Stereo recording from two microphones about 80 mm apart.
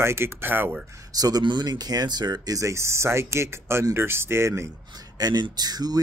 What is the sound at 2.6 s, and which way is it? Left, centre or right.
Speech, right.